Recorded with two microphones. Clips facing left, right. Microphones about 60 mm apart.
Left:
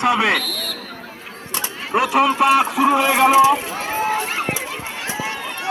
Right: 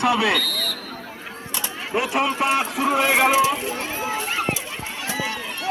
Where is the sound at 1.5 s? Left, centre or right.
Left.